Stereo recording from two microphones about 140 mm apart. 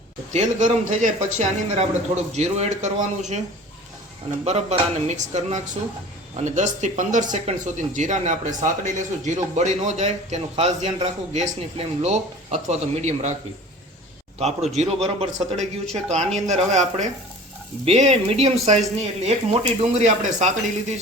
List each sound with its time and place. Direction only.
0.3 s speech: 60° right (ahead or behind)
4.4 s speech: 50° right (ahead or behind)
14.3 s speech: 50° right (ahead or behind)